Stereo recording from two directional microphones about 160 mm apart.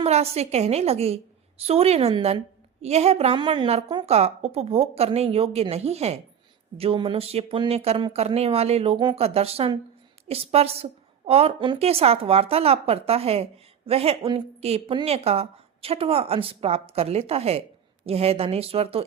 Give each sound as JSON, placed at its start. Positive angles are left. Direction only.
{"t": 0.0, "sound": "a woman's voice", "side_deg": -40}